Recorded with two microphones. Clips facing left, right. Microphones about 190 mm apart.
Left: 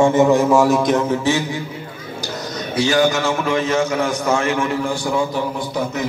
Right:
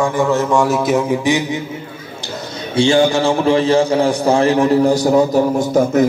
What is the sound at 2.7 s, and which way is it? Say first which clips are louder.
A man's voice: right 4 dB; 30° right (ahead or behind).